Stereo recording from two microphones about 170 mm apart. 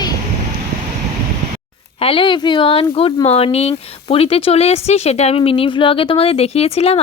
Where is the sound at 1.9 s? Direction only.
35° left (ahead or behind).